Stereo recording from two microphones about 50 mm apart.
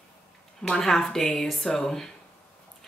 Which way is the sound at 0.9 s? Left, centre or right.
Centre.